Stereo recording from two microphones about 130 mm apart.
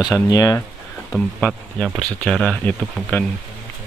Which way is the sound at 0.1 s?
25° left (ahead or behind).